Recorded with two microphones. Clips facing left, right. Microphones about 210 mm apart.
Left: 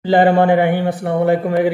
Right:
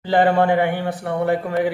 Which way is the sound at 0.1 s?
15° left (ahead or behind).